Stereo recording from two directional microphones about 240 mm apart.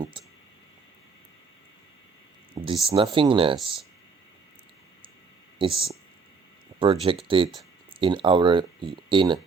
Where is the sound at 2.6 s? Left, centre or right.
Centre.